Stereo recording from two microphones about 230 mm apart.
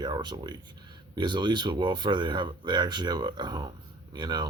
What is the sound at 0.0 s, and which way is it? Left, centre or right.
Speech, centre.